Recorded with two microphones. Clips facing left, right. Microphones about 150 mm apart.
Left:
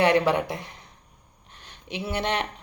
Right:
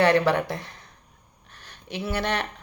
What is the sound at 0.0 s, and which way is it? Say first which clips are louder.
Speech: right 1 dB; 20° left (ahead or behind).